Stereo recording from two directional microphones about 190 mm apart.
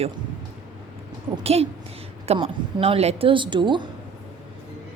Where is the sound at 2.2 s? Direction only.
30° right (ahead or behind).